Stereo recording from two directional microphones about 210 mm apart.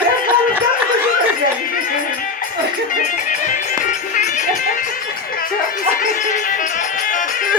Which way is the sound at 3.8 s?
35° left (ahead or behind).